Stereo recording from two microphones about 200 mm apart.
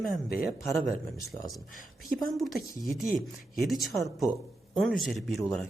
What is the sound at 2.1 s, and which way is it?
Speech, centre (ahead or behind).